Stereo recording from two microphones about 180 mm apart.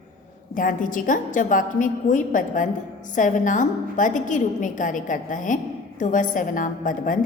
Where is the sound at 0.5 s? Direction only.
45° left (ahead or behind).